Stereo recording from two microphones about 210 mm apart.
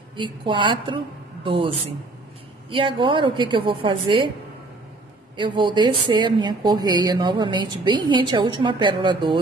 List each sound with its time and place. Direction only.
0.1 s a woman's voice: 20° right (ahead or behind)
5.4 s a woman's voice: 20° right (ahead or behind)